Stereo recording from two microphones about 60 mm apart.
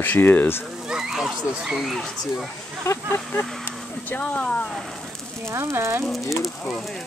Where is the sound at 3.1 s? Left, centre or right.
Left.